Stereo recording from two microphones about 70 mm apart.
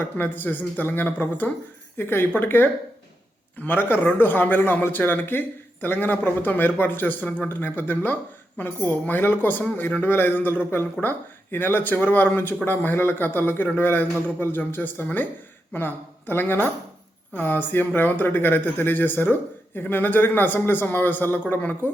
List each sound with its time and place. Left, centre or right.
0.0 s a man's voice: left